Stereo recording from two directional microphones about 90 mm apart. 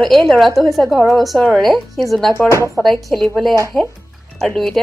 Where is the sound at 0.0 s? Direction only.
5° left (ahead or behind).